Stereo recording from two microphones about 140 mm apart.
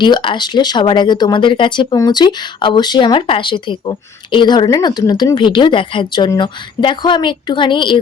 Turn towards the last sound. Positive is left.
turn(degrees=35)  # may be behind; listen again after turning